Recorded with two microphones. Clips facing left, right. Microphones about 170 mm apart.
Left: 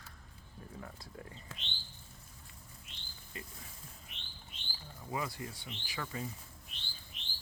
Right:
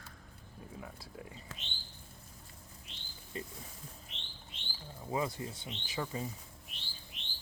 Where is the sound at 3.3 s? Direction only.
30° right (ahead or behind).